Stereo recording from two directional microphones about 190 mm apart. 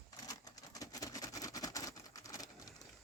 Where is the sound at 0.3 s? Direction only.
20° left (ahead or behind).